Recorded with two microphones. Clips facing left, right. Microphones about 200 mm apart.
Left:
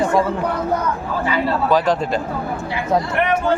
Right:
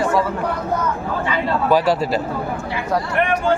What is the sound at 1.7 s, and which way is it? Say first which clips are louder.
Speech: right 2 dB; 10° right (ahead or behind).